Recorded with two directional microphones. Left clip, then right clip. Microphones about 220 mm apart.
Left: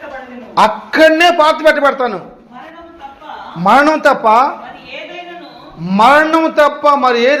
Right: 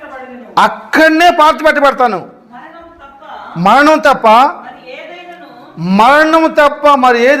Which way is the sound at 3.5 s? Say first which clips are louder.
Right 2 dB; 45° right (ahead or behind).